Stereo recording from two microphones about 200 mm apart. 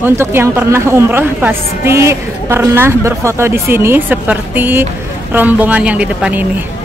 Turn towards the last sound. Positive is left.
turn(degrees=-5)  # may be behind; listen again after turning